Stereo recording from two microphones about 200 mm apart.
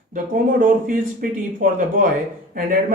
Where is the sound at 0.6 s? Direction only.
45° right (ahead or behind).